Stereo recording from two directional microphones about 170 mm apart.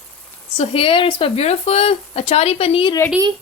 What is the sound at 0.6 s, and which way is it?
Speech, 35° left (ahead or behind).